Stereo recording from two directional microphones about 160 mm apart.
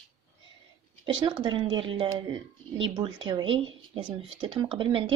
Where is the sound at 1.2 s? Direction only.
30° right (ahead or behind).